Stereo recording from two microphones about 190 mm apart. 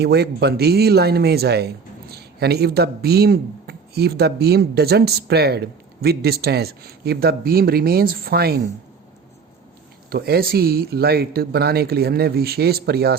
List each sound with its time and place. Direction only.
0.0 s speech: 60° right (ahead or behind)
10.1 s speech: 55° right (ahead or behind)